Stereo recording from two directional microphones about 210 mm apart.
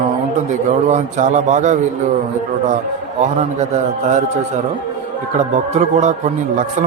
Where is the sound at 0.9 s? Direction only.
35° right (ahead or behind).